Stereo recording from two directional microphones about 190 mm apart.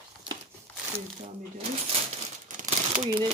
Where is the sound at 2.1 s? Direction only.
35° right (ahead or behind).